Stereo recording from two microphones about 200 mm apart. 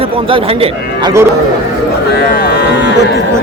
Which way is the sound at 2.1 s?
55° left (ahead or behind).